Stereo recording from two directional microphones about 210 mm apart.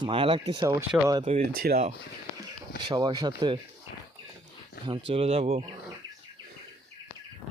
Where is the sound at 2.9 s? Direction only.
20° right (ahead or behind).